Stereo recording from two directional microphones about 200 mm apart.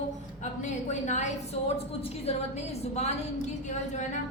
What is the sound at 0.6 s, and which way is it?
A woman's voice, 35° left (ahead or behind).